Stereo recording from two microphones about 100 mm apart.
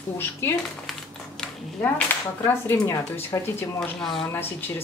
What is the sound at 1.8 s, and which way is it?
Speech, 15° left (ahead or behind).